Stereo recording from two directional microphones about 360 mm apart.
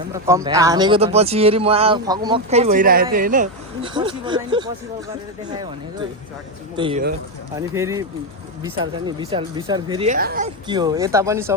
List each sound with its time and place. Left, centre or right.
0.1 s speech: centre
6.7 s speech: centre
10.7 s speech: centre